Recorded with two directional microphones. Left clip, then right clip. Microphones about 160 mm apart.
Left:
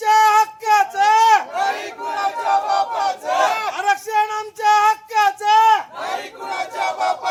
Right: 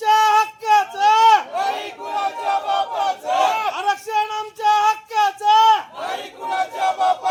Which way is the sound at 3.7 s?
15° left (ahead or behind).